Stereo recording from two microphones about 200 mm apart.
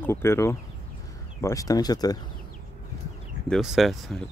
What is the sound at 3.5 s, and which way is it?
Speech, centre (ahead or behind).